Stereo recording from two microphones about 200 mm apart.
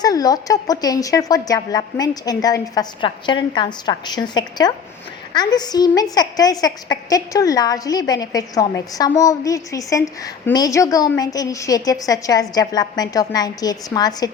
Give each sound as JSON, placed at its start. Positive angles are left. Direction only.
{"t": 0.0, "sound": "a woman's voice", "side_deg": 20}